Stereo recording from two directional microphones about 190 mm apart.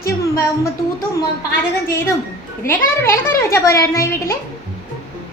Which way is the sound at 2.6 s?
15° left (ahead or behind).